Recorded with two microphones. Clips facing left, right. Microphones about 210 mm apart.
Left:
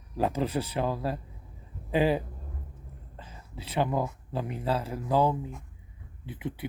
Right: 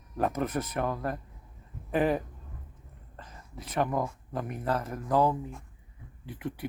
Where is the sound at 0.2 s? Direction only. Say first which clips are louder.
Left 1 dB; 10° left (ahead or behind).